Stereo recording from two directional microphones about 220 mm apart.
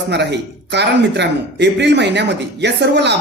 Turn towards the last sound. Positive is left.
turn(degrees=-50)  # may be behind; listen again after turning